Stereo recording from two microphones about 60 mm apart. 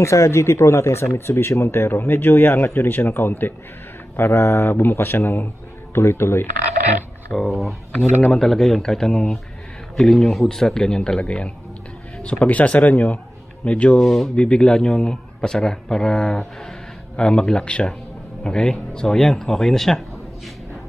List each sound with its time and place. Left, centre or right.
0.0 s speech: left
5.9 s speech: left
7.3 s a man's voice: centre; by 13.9 s left
14.0 s speech: centre
14.3 s a man's voice: centre